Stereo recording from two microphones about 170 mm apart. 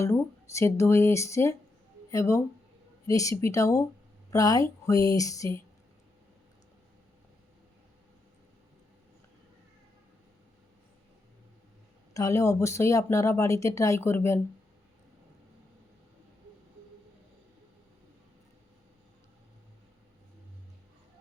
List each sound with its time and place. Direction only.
0.0 s speech: 15° left (ahead or behind)
12.1 s speech: 20° left (ahead or behind)